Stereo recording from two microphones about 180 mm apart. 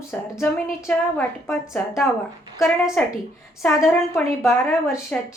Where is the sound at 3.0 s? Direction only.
5° left (ahead or behind).